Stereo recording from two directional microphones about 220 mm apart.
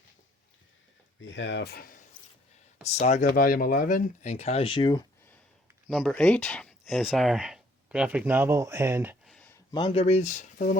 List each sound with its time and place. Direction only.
1.2 s speech: 55° left (ahead or behind)
3.0 s speech: 35° left (ahead or behind); by 5.0 s 20° left (ahead or behind)
5.9 s speech: 5° left (ahead or behind)
9.2 s a sound: 5° left (ahead or behind)
9.7 s speech: 25° left (ahead or behind)